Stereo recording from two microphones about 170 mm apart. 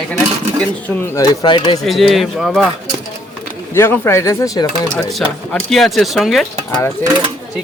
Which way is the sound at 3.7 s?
15° left (ahead or behind).